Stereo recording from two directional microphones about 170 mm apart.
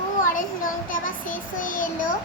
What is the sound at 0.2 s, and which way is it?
Child singing, 55° left (ahead or behind).